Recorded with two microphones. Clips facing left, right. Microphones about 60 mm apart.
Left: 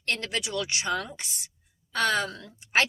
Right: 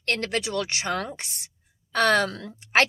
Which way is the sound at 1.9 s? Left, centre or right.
Right.